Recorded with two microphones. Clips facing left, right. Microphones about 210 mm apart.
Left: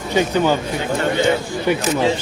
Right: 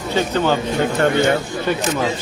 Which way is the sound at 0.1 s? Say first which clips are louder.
Left 2 dB; 15° left (ahead or behind).